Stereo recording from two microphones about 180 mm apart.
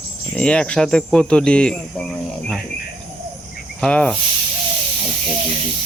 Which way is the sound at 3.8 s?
5° left (ahead or behind).